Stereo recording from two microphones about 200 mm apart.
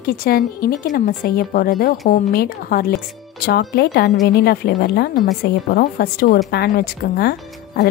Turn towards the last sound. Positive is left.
turn(degrees=50)  # may be behind; listen again after turning